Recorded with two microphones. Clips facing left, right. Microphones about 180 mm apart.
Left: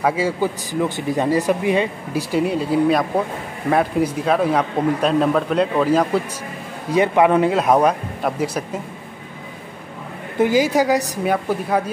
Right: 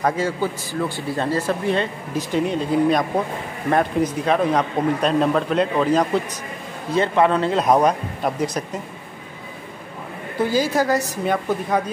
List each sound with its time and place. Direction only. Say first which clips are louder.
0.0 s a man's voice: left 2 dB; 10° left (ahead or behind)
10.4 s a man's voice: left 3 dB; 15° left (ahead or behind)